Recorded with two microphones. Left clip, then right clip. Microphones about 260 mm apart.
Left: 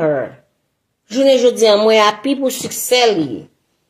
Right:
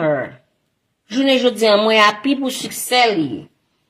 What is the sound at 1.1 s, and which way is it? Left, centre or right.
A woman's voice, right.